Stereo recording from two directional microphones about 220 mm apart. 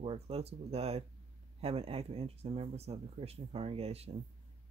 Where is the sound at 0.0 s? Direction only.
25° right (ahead or behind).